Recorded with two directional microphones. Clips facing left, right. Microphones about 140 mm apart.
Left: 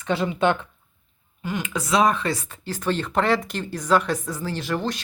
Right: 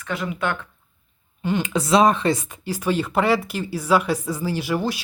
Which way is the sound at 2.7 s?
10° right (ahead or behind).